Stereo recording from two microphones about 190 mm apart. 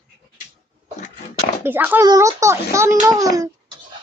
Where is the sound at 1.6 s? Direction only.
10° right (ahead or behind).